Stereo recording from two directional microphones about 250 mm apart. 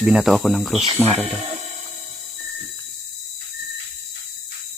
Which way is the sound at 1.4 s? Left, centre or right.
Right.